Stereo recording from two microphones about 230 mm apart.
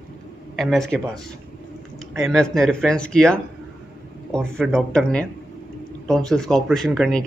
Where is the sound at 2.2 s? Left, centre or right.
Centre.